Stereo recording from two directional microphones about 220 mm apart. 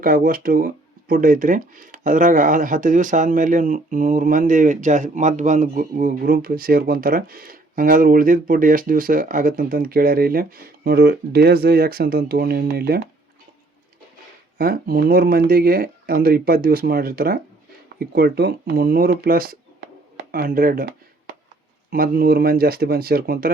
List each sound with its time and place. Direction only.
0.0 s speech: 40° right (ahead or behind)
14.6 s speech: 40° right (ahead or behind)
21.8 s speech: 40° right (ahead or behind)